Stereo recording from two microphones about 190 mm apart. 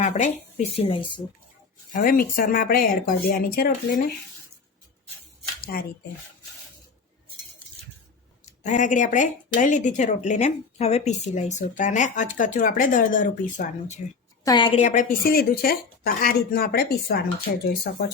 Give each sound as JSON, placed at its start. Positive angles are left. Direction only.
{"t": 0.0, "sound": "a woman's voice", "side_deg": 35}
{"t": 1.9, "sound": "a woman's voice", "side_deg": 45}
{"t": 5.7, "sound": "a woman's voice", "side_deg": 50}
{"t": 8.4, "sound": "a woman's voice", "side_deg": 40}
{"t": 14.4, "sound": "a woman's voice", "side_deg": 20}
{"t": 14.8, "sound": "a woman's voice", "side_deg": 40}
{"t": 15.2, "sound": "a woman's voice", "side_deg": 55}